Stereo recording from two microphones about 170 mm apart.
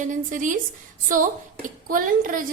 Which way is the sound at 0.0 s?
50° right (ahead or behind).